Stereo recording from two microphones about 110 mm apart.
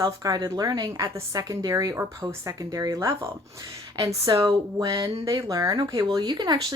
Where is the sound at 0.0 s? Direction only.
35° right (ahead or behind).